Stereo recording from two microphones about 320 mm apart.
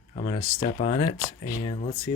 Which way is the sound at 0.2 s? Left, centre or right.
Left.